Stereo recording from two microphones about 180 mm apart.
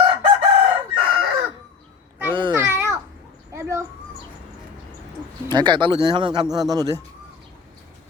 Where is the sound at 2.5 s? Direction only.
15° right (ahead or behind).